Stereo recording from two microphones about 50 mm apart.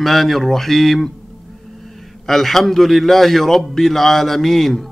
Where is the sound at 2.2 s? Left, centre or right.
Centre.